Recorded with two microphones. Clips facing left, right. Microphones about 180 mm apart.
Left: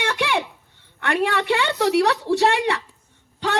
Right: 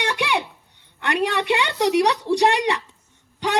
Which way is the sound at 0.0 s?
15° right (ahead or behind).